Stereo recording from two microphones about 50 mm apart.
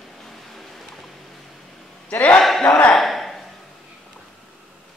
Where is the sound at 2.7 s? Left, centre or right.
Left.